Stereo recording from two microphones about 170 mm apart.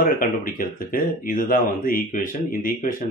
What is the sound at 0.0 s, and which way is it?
Speech, 55° left (ahead or behind).